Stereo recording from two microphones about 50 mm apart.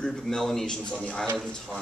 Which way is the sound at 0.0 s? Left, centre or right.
Centre.